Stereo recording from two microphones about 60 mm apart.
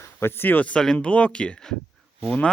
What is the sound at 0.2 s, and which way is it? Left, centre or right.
Speech, left.